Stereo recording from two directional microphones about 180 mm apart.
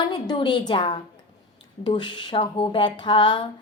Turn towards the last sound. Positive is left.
turn(degrees=25)  # may be behind; listen again after turning